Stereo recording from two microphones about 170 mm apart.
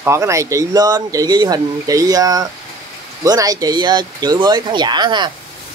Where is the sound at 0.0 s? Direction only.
15° right (ahead or behind).